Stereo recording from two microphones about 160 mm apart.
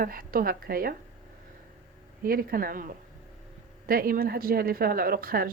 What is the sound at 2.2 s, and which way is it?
Speech, 65° right (ahead or behind).